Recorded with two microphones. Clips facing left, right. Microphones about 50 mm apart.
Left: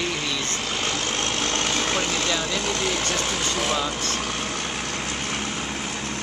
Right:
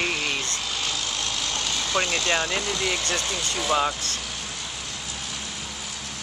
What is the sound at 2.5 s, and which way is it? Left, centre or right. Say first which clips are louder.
Speech: left 1 dB; left.